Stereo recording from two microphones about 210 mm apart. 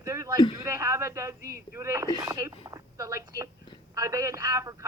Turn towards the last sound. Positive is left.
turn(degrees=-15)  # may be behind; listen again after turning